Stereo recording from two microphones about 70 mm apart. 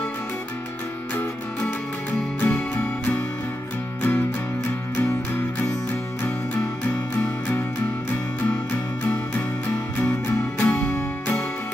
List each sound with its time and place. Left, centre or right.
2.4 s music: left
10.0 s music: centre